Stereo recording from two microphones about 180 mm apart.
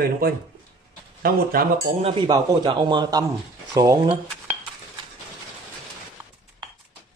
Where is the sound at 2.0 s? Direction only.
30° right (ahead or behind).